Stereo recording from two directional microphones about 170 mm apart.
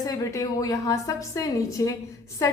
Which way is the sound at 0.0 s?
20° left (ahead or behind).